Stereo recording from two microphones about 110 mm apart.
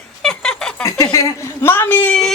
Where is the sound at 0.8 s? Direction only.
30° left (ahead or behind); by 2.3 s 10° left (ahead or behind).